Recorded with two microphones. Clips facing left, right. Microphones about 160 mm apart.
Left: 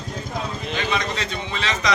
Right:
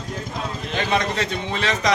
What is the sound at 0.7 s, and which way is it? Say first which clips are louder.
A man's voice: right 3 dB; 50° right (ahead or behind).